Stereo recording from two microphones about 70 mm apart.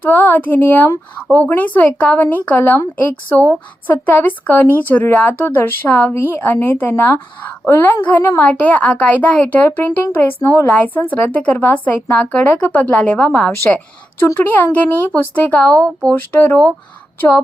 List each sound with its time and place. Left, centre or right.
0.1 s a woman's voice: left; by 13.8 s centre
14.3 s speech: left